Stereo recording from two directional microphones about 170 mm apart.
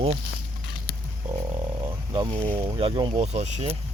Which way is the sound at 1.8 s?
30° right (ahead or behind).